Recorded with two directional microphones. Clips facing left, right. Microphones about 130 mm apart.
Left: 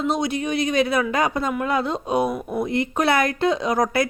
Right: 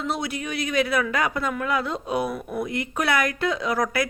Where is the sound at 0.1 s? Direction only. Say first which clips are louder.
Left 6 dB; 20° left (ahead or behind).